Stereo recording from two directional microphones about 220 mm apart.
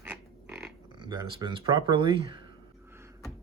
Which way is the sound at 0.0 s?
5° right (ahead or behind).